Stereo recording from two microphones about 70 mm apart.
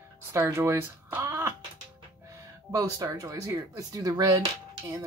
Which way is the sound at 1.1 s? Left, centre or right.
Right.